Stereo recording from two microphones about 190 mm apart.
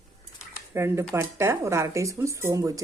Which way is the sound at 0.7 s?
15° right (ahead or behind).